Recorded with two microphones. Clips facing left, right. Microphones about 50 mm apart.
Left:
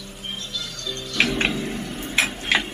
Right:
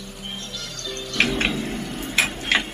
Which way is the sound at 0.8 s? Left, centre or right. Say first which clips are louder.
Right 3 dB; right.